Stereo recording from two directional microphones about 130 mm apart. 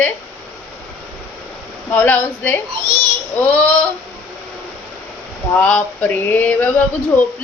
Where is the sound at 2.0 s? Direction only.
15° left (ahead or behind).